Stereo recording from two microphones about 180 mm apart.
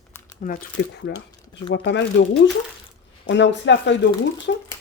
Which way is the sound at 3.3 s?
85° left.